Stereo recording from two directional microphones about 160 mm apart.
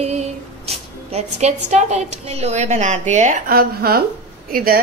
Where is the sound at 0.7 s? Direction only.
40° right (ahead or behind).